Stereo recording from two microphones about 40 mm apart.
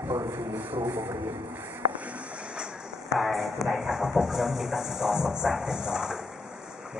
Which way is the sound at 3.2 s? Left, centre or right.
Centre.